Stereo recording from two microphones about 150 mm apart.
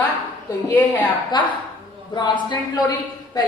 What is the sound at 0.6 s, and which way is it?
Speech, 10° left (ahead or behind).